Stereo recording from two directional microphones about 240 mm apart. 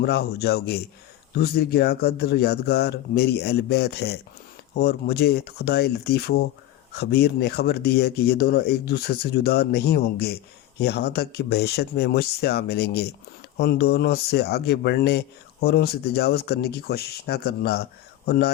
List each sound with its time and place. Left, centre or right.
0.0 s speech: left